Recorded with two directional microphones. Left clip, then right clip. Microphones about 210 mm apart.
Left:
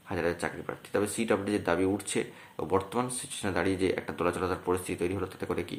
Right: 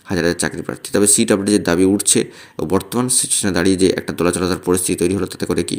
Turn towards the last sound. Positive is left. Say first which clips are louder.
# right 13 dB
turn(degrees=-45)  # may be behind; listen again after turning